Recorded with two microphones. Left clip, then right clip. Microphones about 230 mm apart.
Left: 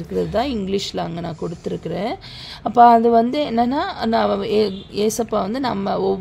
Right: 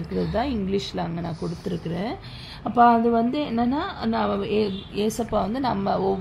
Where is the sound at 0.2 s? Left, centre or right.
Left.